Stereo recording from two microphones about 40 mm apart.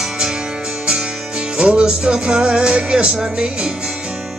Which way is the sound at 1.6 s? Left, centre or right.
Right.